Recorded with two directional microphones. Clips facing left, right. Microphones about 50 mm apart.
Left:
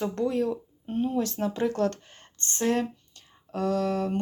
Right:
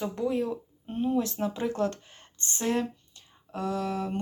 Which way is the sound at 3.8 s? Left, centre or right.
Centre.